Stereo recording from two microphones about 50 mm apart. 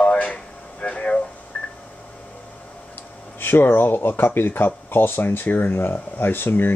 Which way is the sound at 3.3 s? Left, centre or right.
Left.